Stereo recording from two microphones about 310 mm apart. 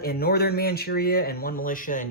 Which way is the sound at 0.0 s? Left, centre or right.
Left.